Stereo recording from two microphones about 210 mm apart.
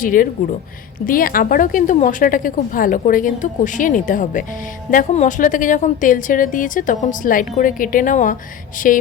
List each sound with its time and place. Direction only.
0.0 s a woman's voice: 40° left (ahead or behind)